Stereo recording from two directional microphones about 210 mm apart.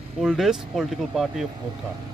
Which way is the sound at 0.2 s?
Centre (ahead or behind).